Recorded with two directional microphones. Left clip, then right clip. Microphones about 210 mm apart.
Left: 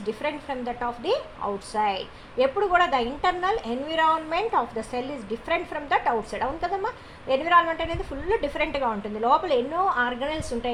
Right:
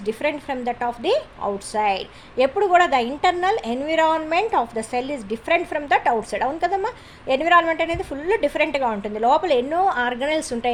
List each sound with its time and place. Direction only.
0.0 s a woman's voice: 50° right (ahead or behind)